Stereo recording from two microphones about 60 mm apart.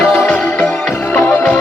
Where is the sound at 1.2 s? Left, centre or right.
Left.